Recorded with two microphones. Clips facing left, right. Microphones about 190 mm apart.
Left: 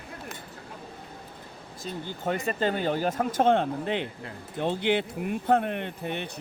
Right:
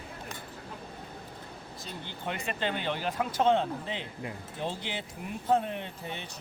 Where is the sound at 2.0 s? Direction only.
45° left (ahead or behind); by 6.3 s 60° left (ahead or behind).